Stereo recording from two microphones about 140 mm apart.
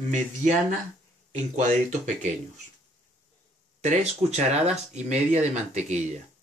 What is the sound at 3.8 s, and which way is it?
Speech, 50° right (ahead or behind).